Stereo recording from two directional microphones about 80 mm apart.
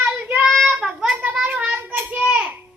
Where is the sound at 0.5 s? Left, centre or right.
Centre.